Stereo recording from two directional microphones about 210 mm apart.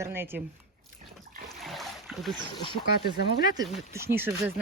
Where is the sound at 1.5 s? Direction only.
Centre (ahead or behind).